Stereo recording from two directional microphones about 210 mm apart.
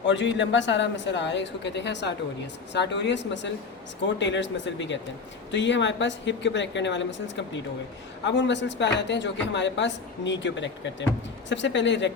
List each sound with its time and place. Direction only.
0.0 s speech: 60° left (ahead or behind)